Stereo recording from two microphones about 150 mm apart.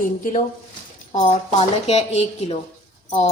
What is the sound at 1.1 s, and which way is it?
A woman's voice, 45° left (ahead or behind).